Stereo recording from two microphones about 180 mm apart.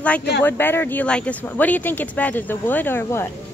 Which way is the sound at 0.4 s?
10° left (ahead or behind).